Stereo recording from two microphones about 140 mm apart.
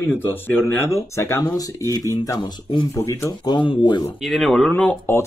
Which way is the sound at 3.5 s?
35° left (ahead or behind).